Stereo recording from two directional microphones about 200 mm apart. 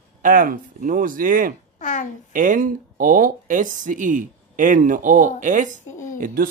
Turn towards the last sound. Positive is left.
turn(degrees=-45)  # may be behind; listen again after turning